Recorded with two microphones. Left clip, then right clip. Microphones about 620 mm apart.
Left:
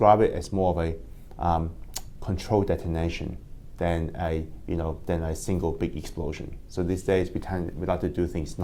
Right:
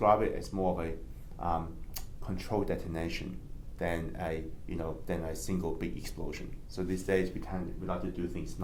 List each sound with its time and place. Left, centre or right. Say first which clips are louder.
0.0 s speech: left 8 dB; left